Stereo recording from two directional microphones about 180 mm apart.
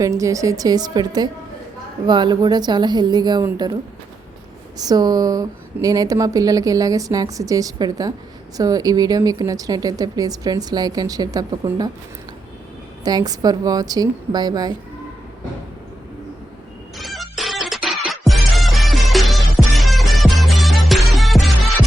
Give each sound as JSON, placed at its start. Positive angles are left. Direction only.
{"t": 0.0, "sound": "speech", "side_deg": -15}
{"t": 4.8, "sound": "speech", "side_deg": -20}
{"t": 13.1, "sound": "speech", "side_deg": -20}
{"t": 17.0, "sound": "music", "side_deg": 0}